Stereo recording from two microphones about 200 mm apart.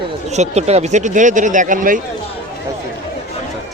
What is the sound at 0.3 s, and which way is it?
Speech, 35° right (ahead or behind).